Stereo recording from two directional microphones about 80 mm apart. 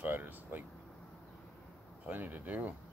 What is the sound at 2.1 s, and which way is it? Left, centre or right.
Speech, right.